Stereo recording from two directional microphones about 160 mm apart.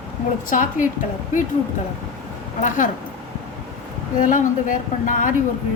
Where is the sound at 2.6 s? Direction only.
55° left (ahead or behind).